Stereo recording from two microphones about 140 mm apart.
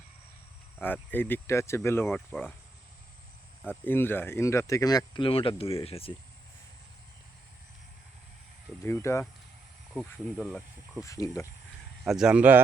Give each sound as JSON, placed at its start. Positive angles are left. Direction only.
{"t": 0.8, "sound": "speech", "side_deg": 15}
{"t": 2.0, "sound": "speech", "side_deg": 5}
{"t": 3.8, "sound": "speech", "side_deg": 15}
{"t": 8.8, "sound": "speech", "side_deg": 20}
{"t": 9.9, "sound": "speech", "side_deg": 0}
{"t": 11.0, "sound": "speech", "side_deg": 25}
{"t": 12.0, "sound": "speech", "side_deg": -5}